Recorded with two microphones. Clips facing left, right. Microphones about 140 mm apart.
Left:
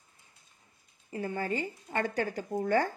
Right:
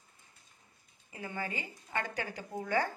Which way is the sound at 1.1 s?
45° left (ahead or behind).